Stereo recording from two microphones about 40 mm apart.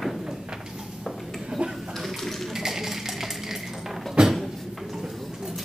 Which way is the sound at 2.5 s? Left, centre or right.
Centre.